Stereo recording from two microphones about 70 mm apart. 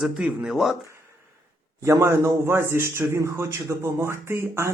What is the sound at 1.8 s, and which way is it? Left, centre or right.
A man's voice, right.